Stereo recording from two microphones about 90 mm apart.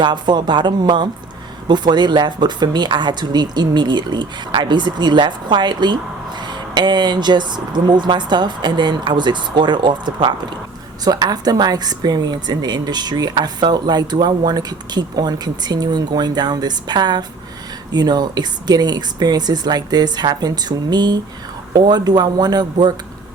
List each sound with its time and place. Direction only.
0.0 s speech: 55° right (ahead or behind)
11.0 s a woman's voice: 45° right (ahead or behind)